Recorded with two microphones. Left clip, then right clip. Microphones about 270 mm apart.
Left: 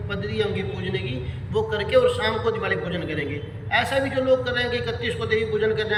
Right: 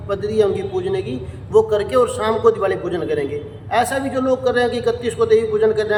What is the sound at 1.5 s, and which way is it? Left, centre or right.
A man's voice, centre.